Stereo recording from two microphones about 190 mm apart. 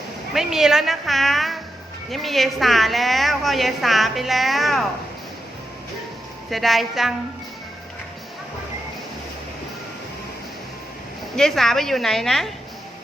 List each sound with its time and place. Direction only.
0.3 s a woman's voice: centre (ahead or behind)
6.5 s a woman's voice: centre (ahead or behind)
11.3 s a woman's voice: centre (ahead or behind)